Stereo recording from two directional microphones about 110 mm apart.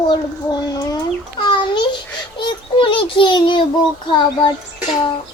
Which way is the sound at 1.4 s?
45° left (ahead or behind).